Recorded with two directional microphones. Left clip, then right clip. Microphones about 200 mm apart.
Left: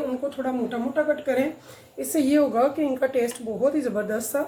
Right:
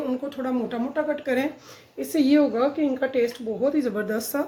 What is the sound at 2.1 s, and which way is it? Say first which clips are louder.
A woman's voice: right 1 dB; 30° right (ahead or behind).